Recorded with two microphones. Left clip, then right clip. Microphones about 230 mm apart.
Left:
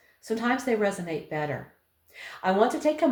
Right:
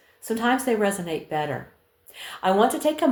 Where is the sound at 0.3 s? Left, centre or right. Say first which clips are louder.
Right 4 dB; right.